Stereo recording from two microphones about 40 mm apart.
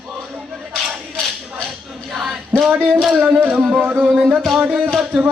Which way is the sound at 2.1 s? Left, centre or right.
Centre.